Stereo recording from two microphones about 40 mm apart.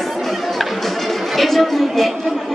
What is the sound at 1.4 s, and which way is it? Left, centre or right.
Speech, centre.